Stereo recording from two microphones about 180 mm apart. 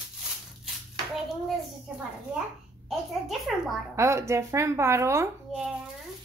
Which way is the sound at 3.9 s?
15° right (ahead or behind).